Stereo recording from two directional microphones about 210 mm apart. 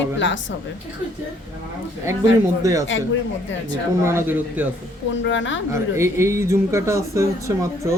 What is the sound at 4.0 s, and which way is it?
Speech, 10° right (ahead or behind).